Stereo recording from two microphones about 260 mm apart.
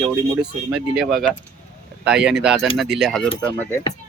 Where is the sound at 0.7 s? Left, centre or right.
Centre.